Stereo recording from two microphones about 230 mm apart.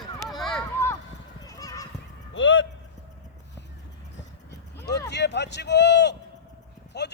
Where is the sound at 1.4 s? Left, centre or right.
Centre.